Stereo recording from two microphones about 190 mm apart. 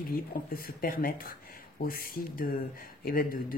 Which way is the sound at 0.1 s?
50° left (ahead or behind).